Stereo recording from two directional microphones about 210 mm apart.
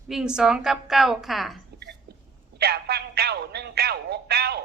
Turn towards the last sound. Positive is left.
turn(degrees=-50)  # may be behind; listen again after turning